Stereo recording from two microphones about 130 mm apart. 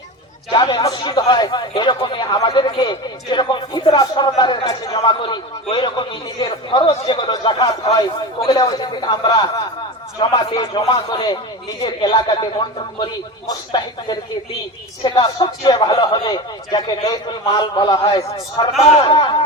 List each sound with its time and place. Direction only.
0.5 s speech: 35° left (ahead or behind)
10.5 s speech: 40° left (ahead or behind)
18.8 s speech: 50° left (ahead or behind)
19.0 s speech: 35° left (ahead or behind)